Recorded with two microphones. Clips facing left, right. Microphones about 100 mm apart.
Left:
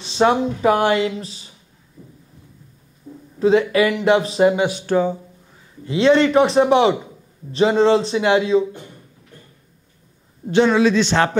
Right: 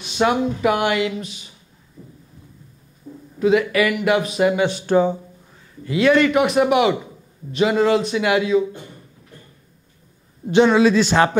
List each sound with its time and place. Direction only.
0.0 s speech: 30° left (ahead or behind)
2.0 s a sound: centre (ahead or behind)
3.3 s speech: 30° left (ahead or behind)
4.8 s speech: 20° right (ahead or behind)
5.9 s speech: 25° left (ahead or behind)
10.5 s a man's voice: 15° right (ahead or behind)